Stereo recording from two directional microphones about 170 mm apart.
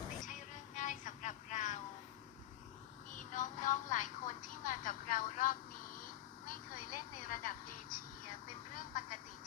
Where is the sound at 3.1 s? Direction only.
50° left (ahead or behind).